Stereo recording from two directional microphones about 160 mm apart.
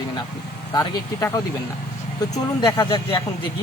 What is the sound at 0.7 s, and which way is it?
Speech, 25° left (ahead or behind).